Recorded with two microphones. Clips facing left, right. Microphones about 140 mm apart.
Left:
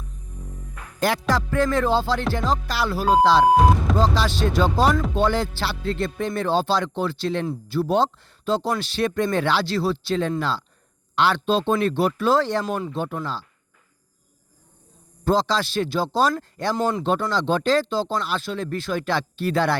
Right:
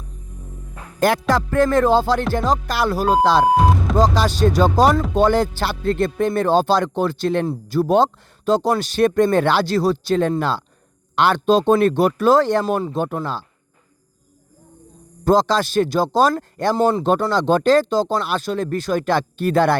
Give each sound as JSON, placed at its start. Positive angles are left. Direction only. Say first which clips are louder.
{"t": 0.9, "sound": "music", "louder": "right 5 dB", "side_deg": -50}
{"t": 1.3, "sound": "speech", "louder": "right 4 dB", "side_deg": -50}
{"t": 3.5, "sound": "speech", "louder": "even", "side_deg": 0}
{"t": 3.9, "sound": "speech", "louder": "right 4 dB", "side_deg": -45}
{"t": 7.4, "sound": "speech", "louder": "right 4 dB", "side_deg": -40}
{"t": 12.6, "sound": "speech", "louder": "right 5 dB", "side_deg": -35}
{"t": 15.2, "sound": "speech", "louder": "right 5 dB", "side_deg": -45}
{"t": 16.7, "sound": "speech", "louder": "right 6 dB", "side_deg": -35}
{"t": 17.0, "sound": "speech", "louder": "right 5 dB", "side_deg": -45}